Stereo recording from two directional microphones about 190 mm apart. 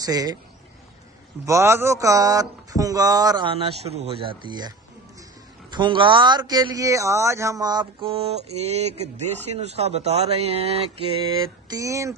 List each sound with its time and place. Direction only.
0.0 s speech: 20° right (ahead or behind)
1.4 s speech: 15° right (ahead or behind); by 10.8 s 30° right (ahead or behind)
11.7 s speech: 15° right (ahead or behind)